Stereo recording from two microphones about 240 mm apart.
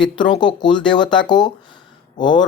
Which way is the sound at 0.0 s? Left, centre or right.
Centre.